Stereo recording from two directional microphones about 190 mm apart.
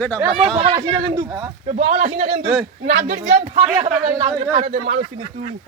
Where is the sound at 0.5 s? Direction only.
30° right (ahead or behind).